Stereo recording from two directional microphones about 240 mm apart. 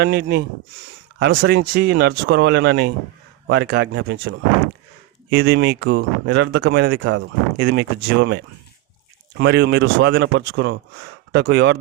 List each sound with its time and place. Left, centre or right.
0.0 s speech: right